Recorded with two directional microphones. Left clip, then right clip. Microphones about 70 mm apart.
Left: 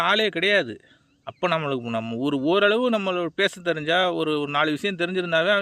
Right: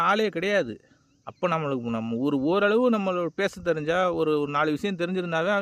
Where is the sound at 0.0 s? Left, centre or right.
Right.